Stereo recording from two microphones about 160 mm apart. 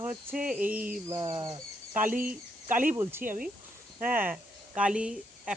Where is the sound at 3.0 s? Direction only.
15° right (ahead or behind).